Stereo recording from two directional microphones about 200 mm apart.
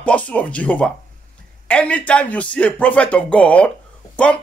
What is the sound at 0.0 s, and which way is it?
Speech, 5° left (ahead or behind).